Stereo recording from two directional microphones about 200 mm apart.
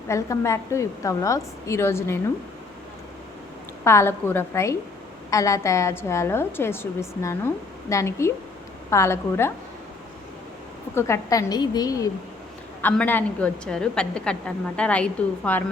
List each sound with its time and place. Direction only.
0.1 s a woman's voice: 15° left (ahead or behind)
3.8 s a woman's voice: 10° left (ahead or behind)
10.9 s a woman's voice: 15° left (ahead or behind)